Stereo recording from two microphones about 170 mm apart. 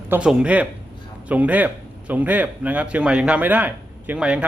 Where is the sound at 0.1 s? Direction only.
5° right (ahead or behind).